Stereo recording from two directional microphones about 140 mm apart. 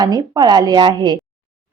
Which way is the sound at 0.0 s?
30° right (ahead or behind).